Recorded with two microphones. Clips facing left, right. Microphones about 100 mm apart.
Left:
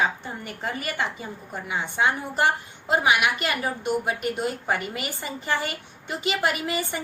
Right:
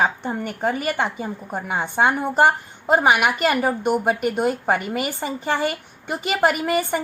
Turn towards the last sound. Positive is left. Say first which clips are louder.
# right 7 dB
turn(degrees=-50)  # may be behind; listen again after turning